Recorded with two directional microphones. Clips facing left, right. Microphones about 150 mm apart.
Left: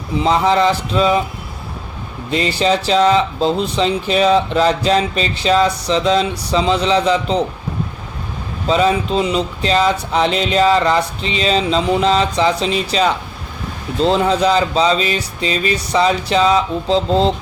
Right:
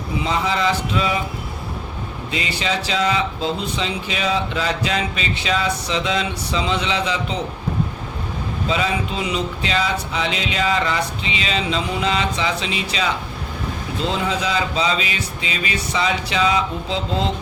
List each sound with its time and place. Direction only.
0.2 s speech: 35° left (ahead or behind)
2.3 s speech: 35° left (ahead or behind)
8.6 s speech: 35° left (ahead or behind)